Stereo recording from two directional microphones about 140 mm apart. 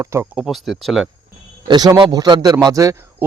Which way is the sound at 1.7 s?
30° right (ahead or behind).